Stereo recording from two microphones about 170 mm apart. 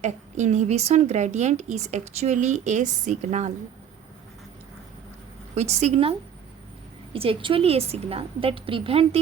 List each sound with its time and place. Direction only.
0.0 s a woman's voice: 45° right (ahead or behind)
5.5 s a woman's voice: 40° right (ahead or behind)